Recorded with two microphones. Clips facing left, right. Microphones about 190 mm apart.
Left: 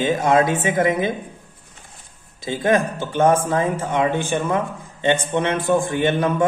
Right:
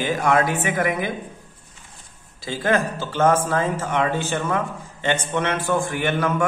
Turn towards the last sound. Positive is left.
turn(degrees=20)  # may be behind; listen again after turning